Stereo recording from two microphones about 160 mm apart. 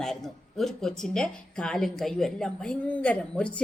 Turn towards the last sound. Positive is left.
turn(degrees=5)  # may be behind; listen again after turning